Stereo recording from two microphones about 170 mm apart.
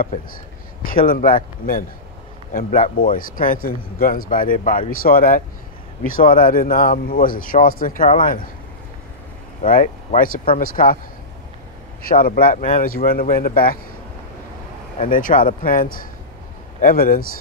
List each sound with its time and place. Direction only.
0.8 s speech: 55° left (ahead or behind)
3.0 s speech: 55° left (ahead or behind)
9.6 s speech: 50° left (ahead or behind)
12.0 s speech: 55° left (ahead or behind)
15.0 s speech: 50° left (ahead or behind)